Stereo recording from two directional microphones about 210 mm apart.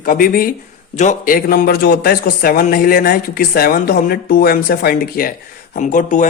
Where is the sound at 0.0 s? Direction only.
40° left (ahead or behind).